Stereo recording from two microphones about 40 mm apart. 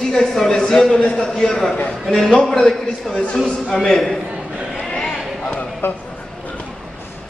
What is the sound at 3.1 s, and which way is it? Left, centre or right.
Speech, centre.